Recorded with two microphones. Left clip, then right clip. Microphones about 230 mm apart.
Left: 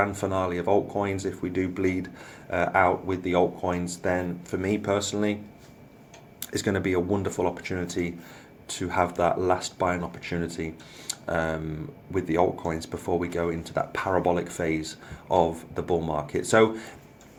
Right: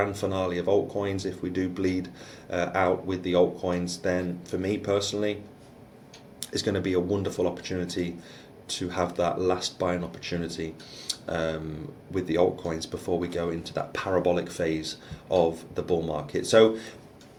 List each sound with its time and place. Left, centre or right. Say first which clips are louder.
0.0 s speech: left 2 dB; left
6.5 s speech: left 1 dB; left